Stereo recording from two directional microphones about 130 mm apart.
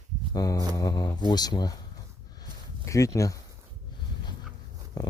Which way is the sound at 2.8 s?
25° left (ahead or behind).